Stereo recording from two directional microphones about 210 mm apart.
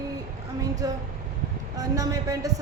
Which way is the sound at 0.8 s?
15° right (ahead or behind).